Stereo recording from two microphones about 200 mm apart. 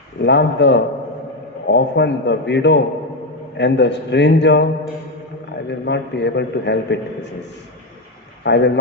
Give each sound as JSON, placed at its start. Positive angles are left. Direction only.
{"t": 0.2, "sound": "a man's voice", "side_deg": 60}
{"t": 8.4, "sound": "a man's voice", "side_deg": 60}